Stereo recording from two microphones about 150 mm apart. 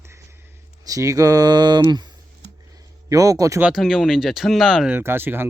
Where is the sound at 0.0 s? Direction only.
15° right (ahead or behind).